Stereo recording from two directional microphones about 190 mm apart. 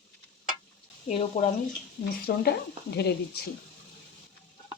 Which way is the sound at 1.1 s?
35° left (ahead or behind).